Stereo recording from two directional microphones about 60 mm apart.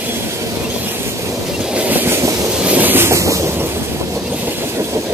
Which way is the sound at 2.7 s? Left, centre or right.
Right.